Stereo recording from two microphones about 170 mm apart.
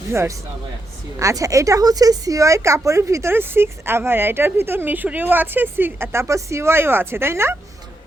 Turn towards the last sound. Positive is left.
turn(degrees=-15)  # may be behind; listen again after turning